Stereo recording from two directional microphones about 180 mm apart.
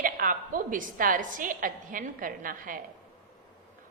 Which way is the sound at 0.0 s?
50° right (ahead or behind).